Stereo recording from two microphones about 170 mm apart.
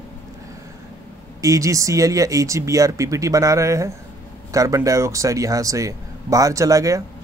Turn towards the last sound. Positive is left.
turn(degrees=-20)  # may be behind; listen again after turning